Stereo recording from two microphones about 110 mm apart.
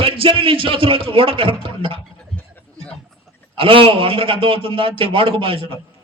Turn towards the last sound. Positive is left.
turn(degrees=-55)  # may be behind; listen again after turning